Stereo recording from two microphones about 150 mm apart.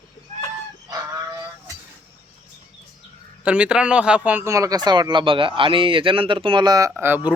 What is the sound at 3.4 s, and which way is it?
Speech, 10° right (ahead or behind).